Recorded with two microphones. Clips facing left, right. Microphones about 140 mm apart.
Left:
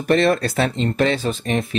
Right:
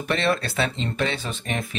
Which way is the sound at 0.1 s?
40° left (ahead or behind).